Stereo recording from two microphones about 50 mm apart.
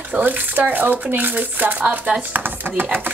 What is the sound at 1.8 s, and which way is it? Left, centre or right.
Speech, right.